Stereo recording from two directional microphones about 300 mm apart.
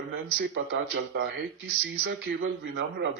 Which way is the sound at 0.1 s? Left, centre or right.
Right.